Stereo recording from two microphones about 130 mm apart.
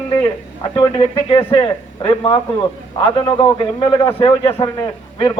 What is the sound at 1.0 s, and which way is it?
A man's voice, 45° left (ahead or behind).